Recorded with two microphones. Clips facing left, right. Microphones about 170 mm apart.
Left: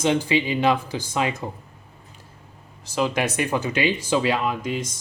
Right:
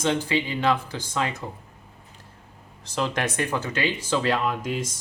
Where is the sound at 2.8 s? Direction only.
5° left (ahead or behind).